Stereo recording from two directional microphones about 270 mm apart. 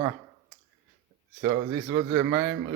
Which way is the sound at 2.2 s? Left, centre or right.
Right.